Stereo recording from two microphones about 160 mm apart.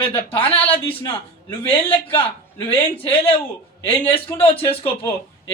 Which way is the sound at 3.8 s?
35° left (ahead or behind).